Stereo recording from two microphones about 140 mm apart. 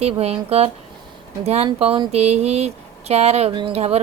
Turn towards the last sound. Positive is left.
turn(degrees=-50)  # may be behind; listen again after turning